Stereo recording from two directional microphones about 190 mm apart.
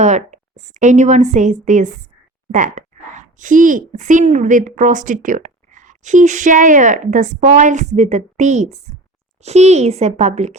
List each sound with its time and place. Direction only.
0.0 s a child's voice: 40° right (ahead or behind)